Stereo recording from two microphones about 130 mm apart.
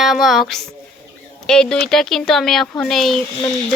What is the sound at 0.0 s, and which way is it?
Speech, centre (ahead or behind).